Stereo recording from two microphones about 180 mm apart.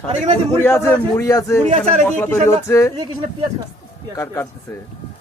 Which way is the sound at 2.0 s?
10° left (ahead or behind).